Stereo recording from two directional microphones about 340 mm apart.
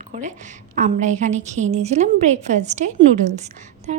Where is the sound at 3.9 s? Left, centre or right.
Right.